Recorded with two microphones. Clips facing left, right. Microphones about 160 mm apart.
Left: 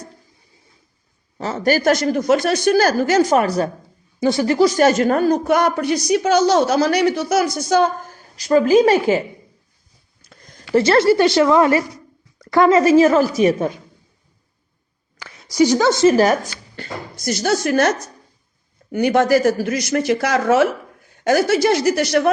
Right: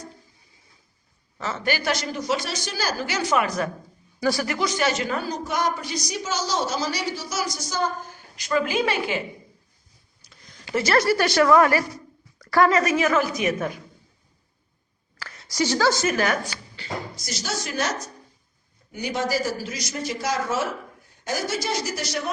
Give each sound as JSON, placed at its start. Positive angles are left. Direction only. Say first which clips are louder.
{"t": 1.4, "sound": "a woman's voice", "louder": "left 8 dB", "side_deg": 35}
{"t": 4.2, "sound": "a man's voice", "louder": "left 9 dB", "side_deg": 25}
{"t": 8.0, "sound": "a woman's voice", "louder": "left 9 dB", "side_deg": 40}
{"t": 10.2, "sound": "a sound", "louder": "left 6 dB", "side_deg": 50}
{"t": 10.8, "sound": "a woman's voice", "louder": "left 7 dB", "side_deg": 30}
{"t": 15.2, "sound": "a woman's voice", "louder": "left 10 dB", "side_deg": 10}
{"t": 16.1, "sound": "a man's voice", "louder": "left 9 dB", "side_deg": 40}